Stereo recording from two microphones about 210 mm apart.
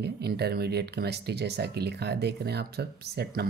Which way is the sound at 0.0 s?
50° right (ahead or behind).